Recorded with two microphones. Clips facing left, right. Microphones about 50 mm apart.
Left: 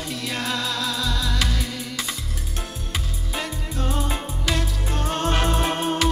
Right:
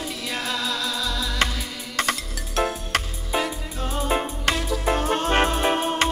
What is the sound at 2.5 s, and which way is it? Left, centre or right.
Music, right.